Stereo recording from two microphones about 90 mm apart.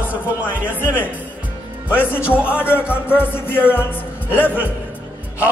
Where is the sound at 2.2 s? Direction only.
15° right (ahead or behind).